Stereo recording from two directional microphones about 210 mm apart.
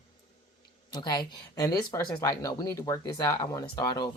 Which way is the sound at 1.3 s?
15° left (ahead or behind).